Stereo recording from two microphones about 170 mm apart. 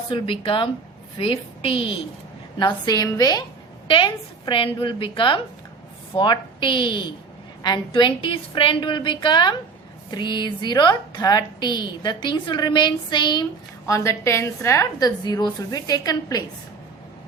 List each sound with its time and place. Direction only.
0.1 s a woman's voice: 30° left (ahead or behind)